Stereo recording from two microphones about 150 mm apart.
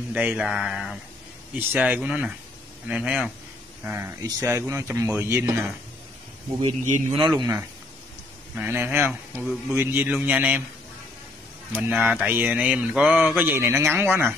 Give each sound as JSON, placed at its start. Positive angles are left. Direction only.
{"t": 0.1, "sound": "speech", "side_deg": -10}
{"t": 7.1, "sound": "speech", "side_deg": -35}
{"t": 8.5, "sound": "speech", "side_deg": -15}
{"t": 11.7, "sound": "speech", "side_deg": -10}